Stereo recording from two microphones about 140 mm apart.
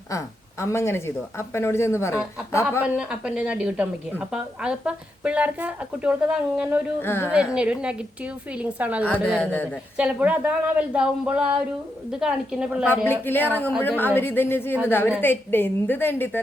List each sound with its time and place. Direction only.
0.1 s a woman's voice: 20° left (ahead or behind)
2.8 s a woman's voice: 5° right (ahead or behind)
7.0 s a woman's voice: 15° left (ahead or behind)
7.3 s a woman's voice: 5° right (ahead or behind)
13.1 s a woman's voice: 15° left (ahead or behind)